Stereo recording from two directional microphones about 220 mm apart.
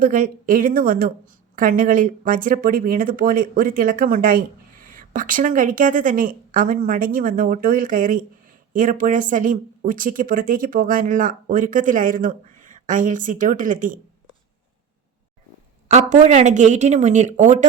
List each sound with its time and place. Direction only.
0.0 s a woman's voice: 40° right (ahead or behind)
15.9 s a woman's voice: 35° right (ahead or behind)